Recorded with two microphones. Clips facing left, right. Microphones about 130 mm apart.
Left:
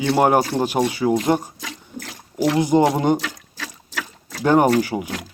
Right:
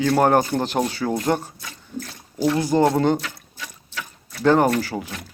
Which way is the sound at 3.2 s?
90° left.